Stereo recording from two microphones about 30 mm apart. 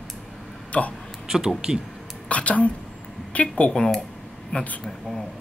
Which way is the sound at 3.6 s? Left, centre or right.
Left.